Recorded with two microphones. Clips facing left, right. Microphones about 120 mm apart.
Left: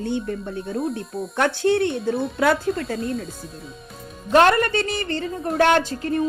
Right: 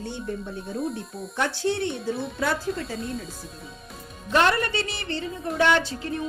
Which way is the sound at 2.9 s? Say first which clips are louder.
Left 5 dB; centre (ahead or behind).